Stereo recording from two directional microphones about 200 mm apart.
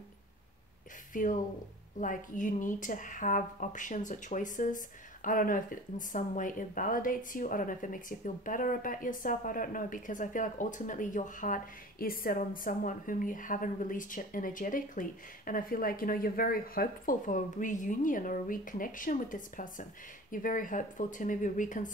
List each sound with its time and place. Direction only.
1.1 s speech: 40° left (ahead or behind)